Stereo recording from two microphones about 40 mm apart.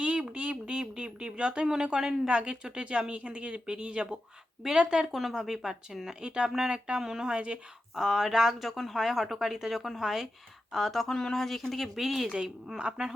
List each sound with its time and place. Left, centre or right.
0.0 s a sound: right
1.6 s speech: centre
5.0 s speech: centre
5.3 s speech: centre
6.2 s speech: right
7.3 s speech: right
7.9 s speech: centre
11.1 s speech: centre
12.8 s speech: centre